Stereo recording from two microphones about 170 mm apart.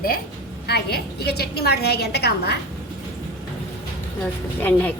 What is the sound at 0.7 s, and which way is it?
A woman's voice, 70° left (ahead or behind).